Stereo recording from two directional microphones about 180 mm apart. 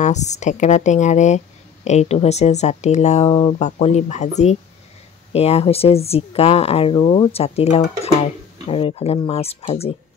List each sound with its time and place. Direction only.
0.0 s speech: 40° left (ahead or behind)